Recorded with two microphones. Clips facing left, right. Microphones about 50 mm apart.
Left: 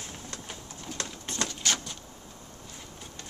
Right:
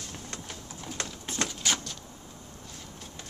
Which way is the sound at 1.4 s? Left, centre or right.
Centre.